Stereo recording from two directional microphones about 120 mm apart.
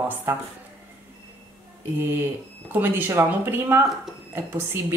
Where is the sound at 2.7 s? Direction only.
15° right (ahead or behind).